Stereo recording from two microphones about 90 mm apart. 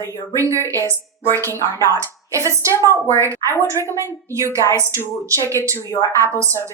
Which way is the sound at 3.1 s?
35° right (ahead or behind).